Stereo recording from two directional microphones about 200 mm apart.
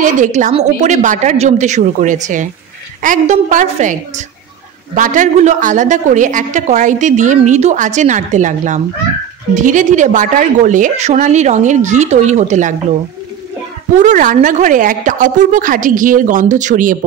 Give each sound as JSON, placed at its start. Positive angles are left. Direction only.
{"t": 0.0, "sound": "a woman's voice", "side_deg": -40}
{"t": 4.9, "sound": "a woman's voice", "side_deg": -40}
{"t": 13.9, "sound": "a woman's voice", "side_deg": -40}